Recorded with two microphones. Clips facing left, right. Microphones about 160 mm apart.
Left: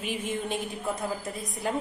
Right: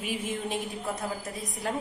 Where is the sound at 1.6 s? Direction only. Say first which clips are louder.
Left 2 dB; centre (ahead or behind).